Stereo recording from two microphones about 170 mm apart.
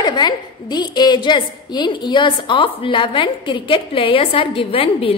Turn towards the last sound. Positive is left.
turn(degrees=35)  # may be behind; listen again after turning